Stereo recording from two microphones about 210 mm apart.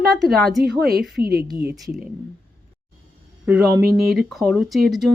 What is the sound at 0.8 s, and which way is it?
Speech, 50° right (ahead or behind).